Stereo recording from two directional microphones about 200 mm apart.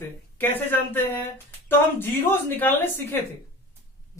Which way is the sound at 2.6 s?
10° left (ahead or behind).